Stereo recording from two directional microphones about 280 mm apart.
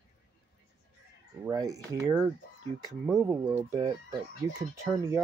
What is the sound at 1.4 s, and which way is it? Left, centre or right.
Speech, centre.